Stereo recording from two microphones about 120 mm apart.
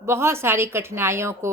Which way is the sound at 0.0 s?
20° right (ahead or behind).